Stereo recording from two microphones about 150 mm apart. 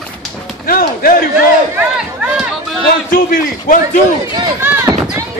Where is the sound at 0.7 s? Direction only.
70° left (ahead or behind).